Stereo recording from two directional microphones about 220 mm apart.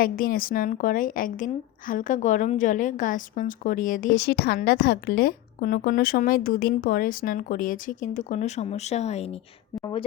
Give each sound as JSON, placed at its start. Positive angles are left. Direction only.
{"t": 0.0, "sound": "a woman's voice", "side_deg": 40}